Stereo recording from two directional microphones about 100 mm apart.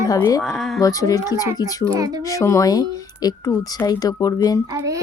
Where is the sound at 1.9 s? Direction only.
40° right (ahead or behind).